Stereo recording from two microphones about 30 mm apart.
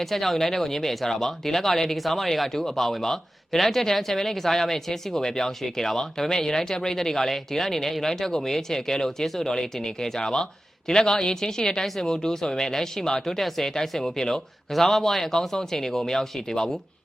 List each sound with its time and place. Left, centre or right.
0.0 s speech: centre